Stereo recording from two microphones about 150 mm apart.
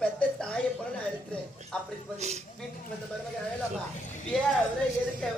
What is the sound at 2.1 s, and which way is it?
Speech, 45° right (ahead or behind).